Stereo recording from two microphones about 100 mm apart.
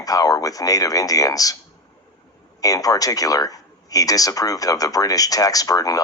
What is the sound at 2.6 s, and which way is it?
Speech, 35° left (ahead or behind).